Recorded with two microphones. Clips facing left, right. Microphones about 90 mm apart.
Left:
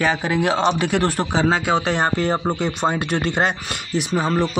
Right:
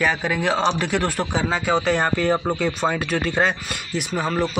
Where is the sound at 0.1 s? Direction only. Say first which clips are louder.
Left 2 dB; 25° left (ahead or behind).